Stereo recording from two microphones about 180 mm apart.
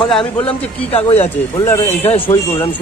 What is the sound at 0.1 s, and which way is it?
Speech, 30° left (ahead or behind).